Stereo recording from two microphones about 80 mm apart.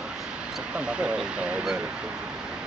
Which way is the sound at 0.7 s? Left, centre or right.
Centre.